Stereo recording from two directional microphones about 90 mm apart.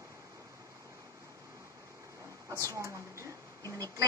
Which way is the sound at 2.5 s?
35° right (ahead or behind).